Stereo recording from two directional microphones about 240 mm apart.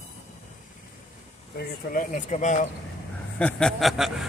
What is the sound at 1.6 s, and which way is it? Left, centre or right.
Speech, left.